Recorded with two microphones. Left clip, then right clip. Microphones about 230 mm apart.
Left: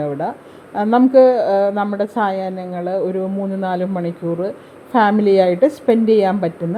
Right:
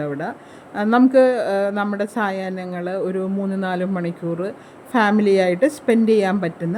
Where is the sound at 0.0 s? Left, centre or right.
Centre.